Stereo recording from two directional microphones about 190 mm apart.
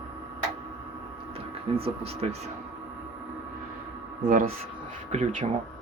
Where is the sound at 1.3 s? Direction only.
30° right (ahead or behind).